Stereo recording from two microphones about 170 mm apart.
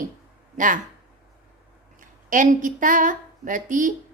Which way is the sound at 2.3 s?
50° right (ahead or behind).